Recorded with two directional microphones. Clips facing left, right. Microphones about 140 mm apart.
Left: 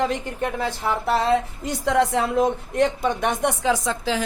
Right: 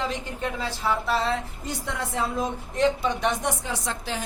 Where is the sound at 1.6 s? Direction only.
90° left.